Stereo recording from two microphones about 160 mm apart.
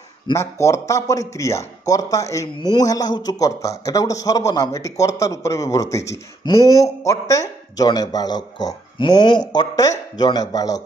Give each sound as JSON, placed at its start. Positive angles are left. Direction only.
{"t": 0.3, "sound": "a man's voice", "side_deg": 20}